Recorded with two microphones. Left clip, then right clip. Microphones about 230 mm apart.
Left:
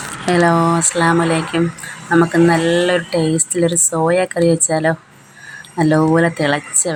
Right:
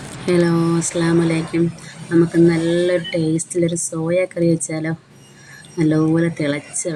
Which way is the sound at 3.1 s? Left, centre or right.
Left.